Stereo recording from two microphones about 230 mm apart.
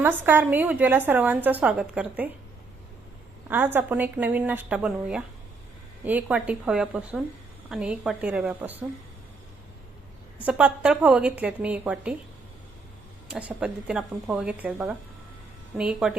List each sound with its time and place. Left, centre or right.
0.0 s a woman's voice: centre
3.5 s a woman's voice: centre
10.4 s a woman's voice: centre
13.3 s a woman's voice: centre